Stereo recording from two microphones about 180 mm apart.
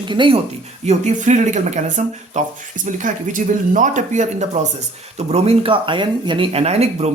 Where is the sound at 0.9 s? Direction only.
40° right (ahead or behind).